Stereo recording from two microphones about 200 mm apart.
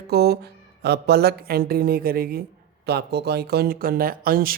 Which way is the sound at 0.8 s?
55° right (ahead or behind).